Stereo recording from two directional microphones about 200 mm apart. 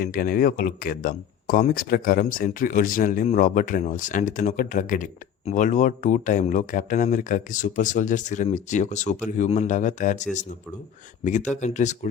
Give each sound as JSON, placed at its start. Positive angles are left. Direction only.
{"t": 0.0, "sound": "speech", "side_deg": 45}